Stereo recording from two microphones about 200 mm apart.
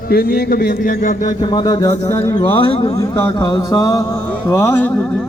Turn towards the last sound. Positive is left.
turn(degrees=10)  # may be behind; listen again after turning